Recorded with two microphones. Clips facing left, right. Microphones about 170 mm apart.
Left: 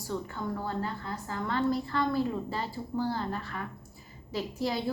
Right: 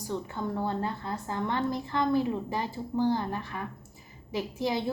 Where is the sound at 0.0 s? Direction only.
20° right (ahead or behind).